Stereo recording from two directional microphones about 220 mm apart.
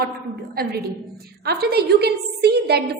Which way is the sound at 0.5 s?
45° right (ahead or behind).